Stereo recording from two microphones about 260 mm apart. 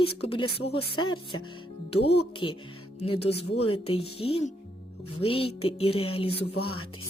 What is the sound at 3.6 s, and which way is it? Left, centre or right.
Speech, left.